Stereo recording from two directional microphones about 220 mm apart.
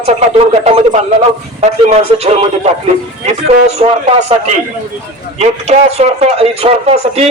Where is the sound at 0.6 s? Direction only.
30° right (ahead or behind).